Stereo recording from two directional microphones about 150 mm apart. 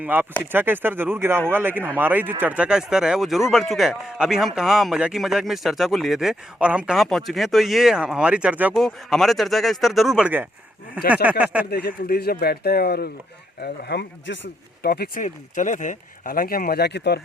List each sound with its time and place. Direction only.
0.0 s speech: 15° right (ahead or behind)
11.6 s speech: 90° left